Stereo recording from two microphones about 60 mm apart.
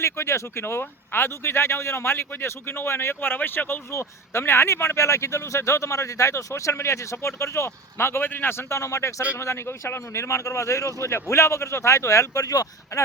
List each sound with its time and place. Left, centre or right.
0.0 s speech: left
3.9 s speech: left
9.2 s speech: left